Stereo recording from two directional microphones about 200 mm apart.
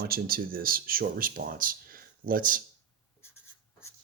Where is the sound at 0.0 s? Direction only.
50° right (ahead or behind).